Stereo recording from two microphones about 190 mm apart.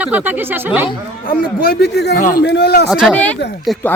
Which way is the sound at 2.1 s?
45° left (ahead or behind).